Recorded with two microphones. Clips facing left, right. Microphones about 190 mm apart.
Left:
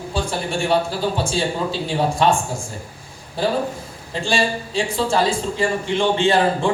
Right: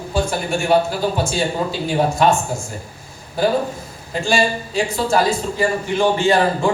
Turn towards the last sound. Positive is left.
turn(degrees=30)  # may be behind; listen again after turning